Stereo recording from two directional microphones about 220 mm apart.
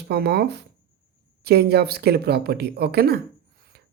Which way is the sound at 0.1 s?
45° right (ahead or behind).